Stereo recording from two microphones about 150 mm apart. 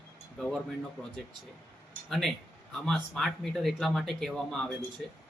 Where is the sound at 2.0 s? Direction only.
Centre (ahead or behind).